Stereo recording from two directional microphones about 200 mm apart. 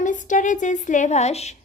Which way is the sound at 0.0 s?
40° left (ahead or behind).